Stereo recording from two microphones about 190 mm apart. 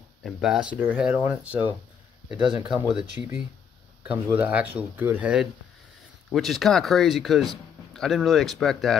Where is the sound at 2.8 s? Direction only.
5° right (ahead or behind).